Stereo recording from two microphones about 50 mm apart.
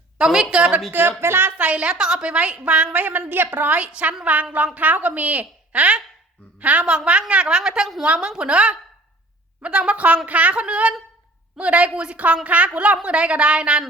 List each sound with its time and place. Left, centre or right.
0.2 s a woman's voice: centre
0.9 s speech: right
1.5 s a woman's voice: right